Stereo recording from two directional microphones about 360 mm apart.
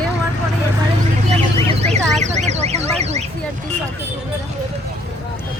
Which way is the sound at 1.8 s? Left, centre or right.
Centre.